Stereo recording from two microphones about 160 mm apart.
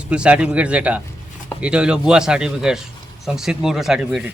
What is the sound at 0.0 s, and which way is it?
A man's voice, 5° right (ahead or behind).